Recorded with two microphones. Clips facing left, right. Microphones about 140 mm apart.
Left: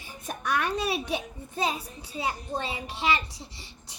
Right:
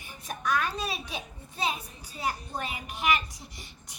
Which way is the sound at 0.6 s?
65° left (ahead or behind).